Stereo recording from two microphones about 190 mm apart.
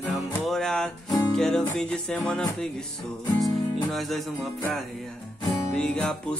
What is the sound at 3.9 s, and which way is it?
Music, centre (ahead or behind).